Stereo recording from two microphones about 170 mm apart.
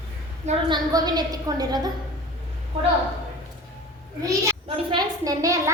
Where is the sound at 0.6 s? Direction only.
25° right (ahead or behind).